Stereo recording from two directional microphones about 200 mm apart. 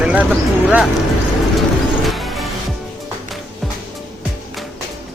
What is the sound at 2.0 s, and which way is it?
Music, centre (ahead or behind).